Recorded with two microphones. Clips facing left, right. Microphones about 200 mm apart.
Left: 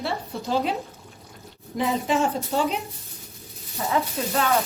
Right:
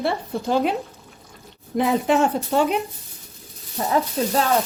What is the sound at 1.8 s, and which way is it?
A woman's voice, 60° right (ahead or behind).